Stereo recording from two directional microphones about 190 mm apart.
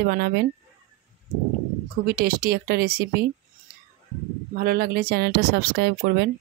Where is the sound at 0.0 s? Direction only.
55° right (ahead or behind).